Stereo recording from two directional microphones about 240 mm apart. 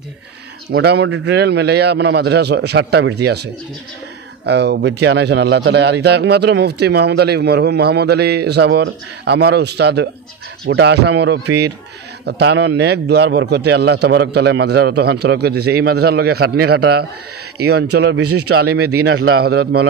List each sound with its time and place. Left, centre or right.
0.7 s a man's voice: right
4.5 s a man's voice: right
18.5 s a man's voice: right